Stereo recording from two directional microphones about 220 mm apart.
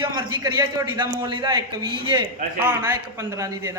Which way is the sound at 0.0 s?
20° right (ahead or behind).